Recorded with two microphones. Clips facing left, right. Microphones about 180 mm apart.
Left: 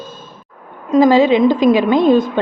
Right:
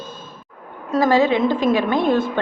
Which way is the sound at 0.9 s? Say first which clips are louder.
Left 6 dB; 20° left (ahead or behind).